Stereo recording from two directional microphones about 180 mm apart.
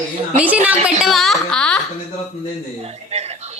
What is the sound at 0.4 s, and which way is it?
A woman's voice, 10° right (ahead or behind).